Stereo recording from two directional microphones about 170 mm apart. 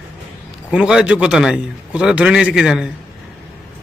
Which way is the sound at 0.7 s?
5° right (ahead or behind).